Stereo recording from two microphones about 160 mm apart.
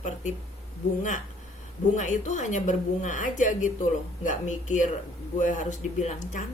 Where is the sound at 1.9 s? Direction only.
50° left (ahead or behind).